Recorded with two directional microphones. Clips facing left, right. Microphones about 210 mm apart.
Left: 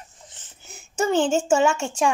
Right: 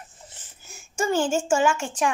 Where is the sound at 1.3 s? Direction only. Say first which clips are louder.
Left 2 dB; 25° left (ahead or behind).